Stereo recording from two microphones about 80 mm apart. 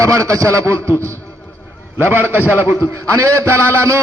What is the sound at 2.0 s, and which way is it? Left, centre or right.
Speech, right.